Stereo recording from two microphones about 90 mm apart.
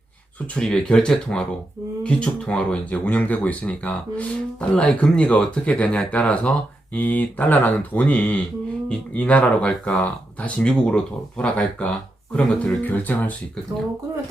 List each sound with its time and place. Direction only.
0.5 s speech: 10° left (ahead or behind)